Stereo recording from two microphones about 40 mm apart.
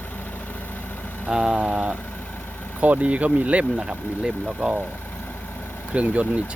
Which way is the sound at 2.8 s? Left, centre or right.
Right.